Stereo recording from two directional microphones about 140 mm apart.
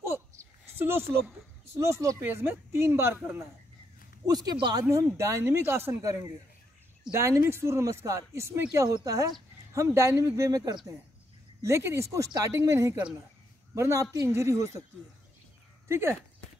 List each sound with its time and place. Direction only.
0.0 s a sound: 15° right (ahead or behind)
1.7 s speech: 20° right (ahead or behind)
4.3 s speech: 30° right (ahead or behind)
15.9 s speech: 15° right (ahead or behind)